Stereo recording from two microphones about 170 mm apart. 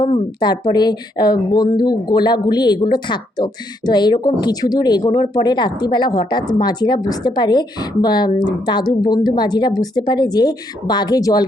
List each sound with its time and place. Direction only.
0.3 s speech: 25° left (ahead or behind)